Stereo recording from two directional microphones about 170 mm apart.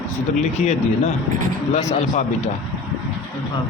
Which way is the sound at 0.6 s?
45° left (ahead or behind).